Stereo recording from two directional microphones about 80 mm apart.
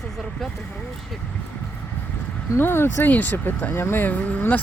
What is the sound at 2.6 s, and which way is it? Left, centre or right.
Speech, left.